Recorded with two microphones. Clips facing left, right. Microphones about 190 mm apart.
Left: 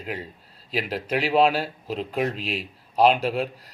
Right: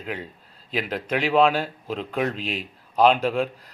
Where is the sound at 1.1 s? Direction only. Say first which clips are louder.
Right 1 dB; 35° left (ahead or behind).